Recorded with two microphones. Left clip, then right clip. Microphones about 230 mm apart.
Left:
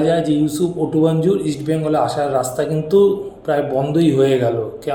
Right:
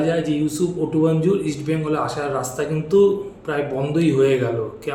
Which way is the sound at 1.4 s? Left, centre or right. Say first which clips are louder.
Left 3 dB; centre.